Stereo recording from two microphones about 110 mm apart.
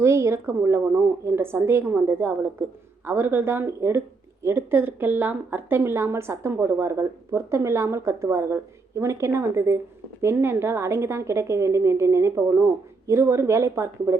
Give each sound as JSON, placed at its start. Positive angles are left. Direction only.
{"t": 0.0, "sound": "speech", "side_deg": -25}